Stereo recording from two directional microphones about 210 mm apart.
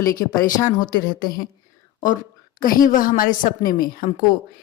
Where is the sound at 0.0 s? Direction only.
15° left (ahead or behind).